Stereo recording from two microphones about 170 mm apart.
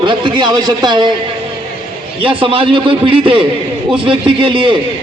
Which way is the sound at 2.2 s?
30° right (ahead or behind).